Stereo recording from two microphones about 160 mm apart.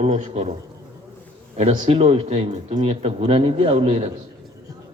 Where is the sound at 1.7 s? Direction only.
40° right (ahead or behind).